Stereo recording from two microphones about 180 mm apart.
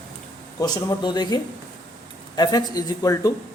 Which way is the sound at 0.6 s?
20° left (ahead or behind).